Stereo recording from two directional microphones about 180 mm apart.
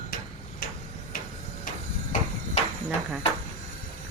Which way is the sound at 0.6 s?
55° left (ahead or behind).